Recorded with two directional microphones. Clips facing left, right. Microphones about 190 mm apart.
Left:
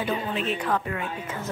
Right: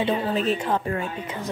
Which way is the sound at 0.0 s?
35° right (ahead or behind).